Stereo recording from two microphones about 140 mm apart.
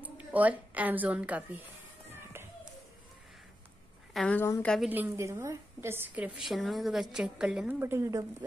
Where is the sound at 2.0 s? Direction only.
15° right (ahead or behind).